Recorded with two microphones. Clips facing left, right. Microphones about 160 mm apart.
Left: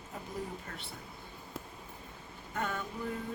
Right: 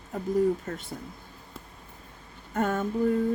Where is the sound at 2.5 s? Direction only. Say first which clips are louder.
Right 10 dB; 45° right (ahead or behind).